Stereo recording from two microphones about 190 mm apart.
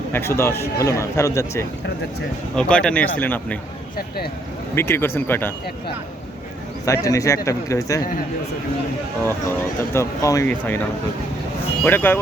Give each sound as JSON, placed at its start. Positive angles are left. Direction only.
{"t": 0.1, "sound": "speech", "side_deg": 15}
{"t": 2.6, "sound": "speech", "side_deg": 5}
{"t": 4.7, "sound": "speech", "side_deg": 10}
{"t": 6.8, "sound": "speech", "side_deg": 15}
{"t": 9.9, "sound": "speech", "side_deg": 15}
{"t": 11.8, "sound": "speech", "side_deg": 10}